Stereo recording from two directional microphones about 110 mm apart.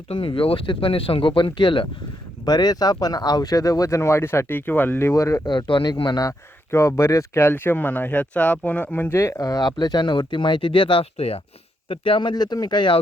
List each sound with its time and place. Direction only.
0.1 s speech: 55° left (ahead or behind)
2.4 s speech: 40° left (ahead or behind)
5.5 s speech: 45° left (ahead or behind)
6.7 s speech: 25° left (ahead or behind)
9.4 s speech: 35° left (ahead or behind)